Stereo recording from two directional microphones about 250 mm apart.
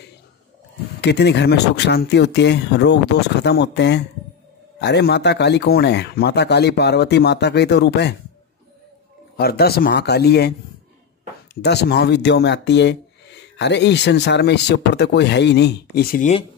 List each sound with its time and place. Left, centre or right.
1.0 s speech: left
9.4 s speech: left
11.6 s speech: left